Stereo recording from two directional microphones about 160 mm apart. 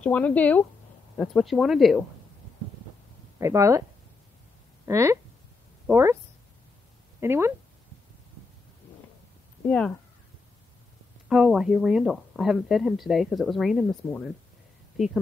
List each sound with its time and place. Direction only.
0.0 s speech: 10° left (ahead or behind)
3.3 s speech: 20° right (ahead or behind)
4.8 s speech: 20° right (ahead or behind)
7.2 s speech: 15° right (ahead or behind)
9.7 s speech: 5° left (ahead or behind)
11.2 s speech: 5° right (ahead or behind)